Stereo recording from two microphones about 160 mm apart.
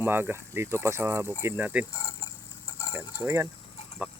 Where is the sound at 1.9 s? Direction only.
20° left (ahead or behind).